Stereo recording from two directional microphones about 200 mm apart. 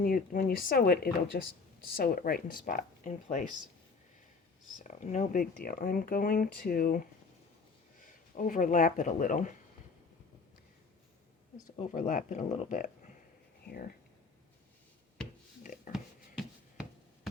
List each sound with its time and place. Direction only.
0.0 s speech: 45° left (ahead or behind)
4.8 s speech: 35° left (ahead or behind)
11.9 s speech: 40° left (ahead or behind)
15.6 s a sound: 40° left (ahead or behind)